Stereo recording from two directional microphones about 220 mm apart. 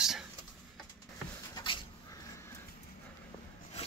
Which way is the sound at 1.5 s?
20° left (ahead or behind).